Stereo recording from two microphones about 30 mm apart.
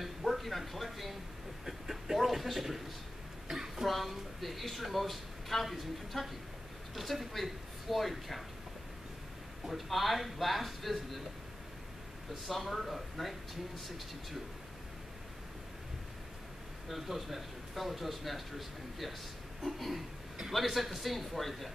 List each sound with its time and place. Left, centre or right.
0.0 s a sound: centre
1.7 s speech: centre
3.4 s a sound: centre
3.8 s speech: centre
9.7 s speech: centre
12.4 s speech: centre
16.9 s speech: centre